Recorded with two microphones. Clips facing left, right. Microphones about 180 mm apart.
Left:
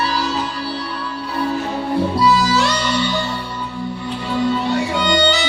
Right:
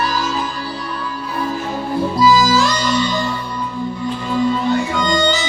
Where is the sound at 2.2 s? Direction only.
70° left (ahead or behind).